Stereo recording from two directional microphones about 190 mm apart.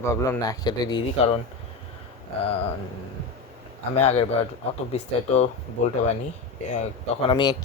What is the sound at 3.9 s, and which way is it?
Speech, 35° left (ahead or behind).